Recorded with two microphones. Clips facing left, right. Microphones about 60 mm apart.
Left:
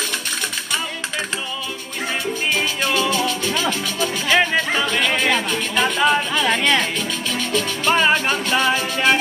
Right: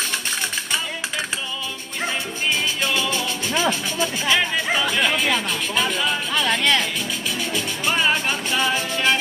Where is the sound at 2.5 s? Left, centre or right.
Left.